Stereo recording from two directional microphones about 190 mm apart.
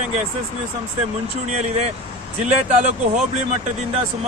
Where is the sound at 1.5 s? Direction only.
35° right (ahead or behind).